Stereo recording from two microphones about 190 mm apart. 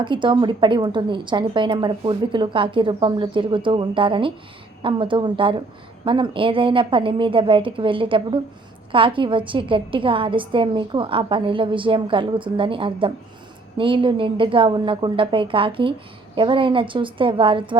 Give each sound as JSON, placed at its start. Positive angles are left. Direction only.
{"t": 0.0, "sound": "a woman's voice", "side_deg": -25}